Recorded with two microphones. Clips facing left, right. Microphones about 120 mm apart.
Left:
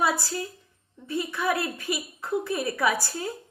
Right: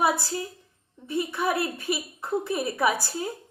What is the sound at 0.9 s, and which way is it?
A woman's voice, 20° right (ahead or behind).